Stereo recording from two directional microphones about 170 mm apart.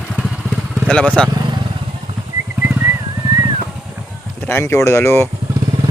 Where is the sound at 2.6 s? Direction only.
10° right (ahead or behind).